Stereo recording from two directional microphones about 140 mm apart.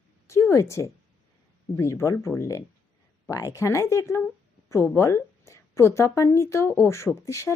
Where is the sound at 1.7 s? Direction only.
20° left (ahead or behind).